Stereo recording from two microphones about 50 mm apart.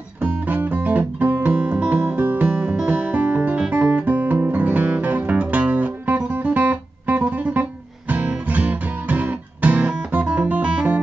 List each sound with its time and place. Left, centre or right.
0.2 s music: right
2.0 s music: right
3.7 s guitar: right